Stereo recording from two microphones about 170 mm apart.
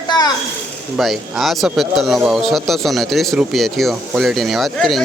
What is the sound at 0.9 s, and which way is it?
Speech, centre (ahead or behind).